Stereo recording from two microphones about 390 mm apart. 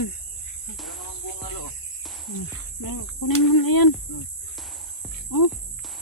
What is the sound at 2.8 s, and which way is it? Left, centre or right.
Speech, left.